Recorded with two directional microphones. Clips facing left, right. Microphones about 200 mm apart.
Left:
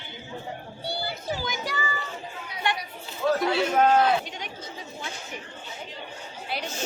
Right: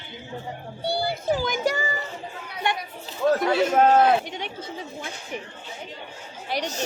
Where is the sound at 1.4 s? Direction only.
50° right (ahead or behind).